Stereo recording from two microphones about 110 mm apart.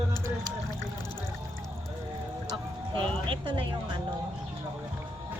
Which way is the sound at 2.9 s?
50° right (ahead or behind).